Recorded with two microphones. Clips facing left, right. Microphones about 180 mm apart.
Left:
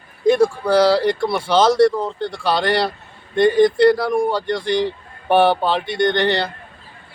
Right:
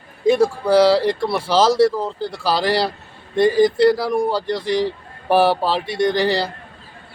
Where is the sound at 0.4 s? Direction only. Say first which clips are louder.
Right 1 dB; 5° right (ahead or behind).